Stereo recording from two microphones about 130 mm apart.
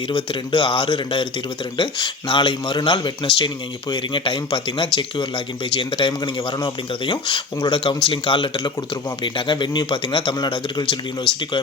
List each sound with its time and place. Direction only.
0.1 s speech: 40° left (ahead or behind)
11.3 s speech: 5° left (ahead or behind)